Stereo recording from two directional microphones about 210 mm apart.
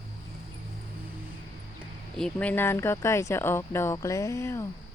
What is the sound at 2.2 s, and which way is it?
Speech, 5° left (ahead or behind).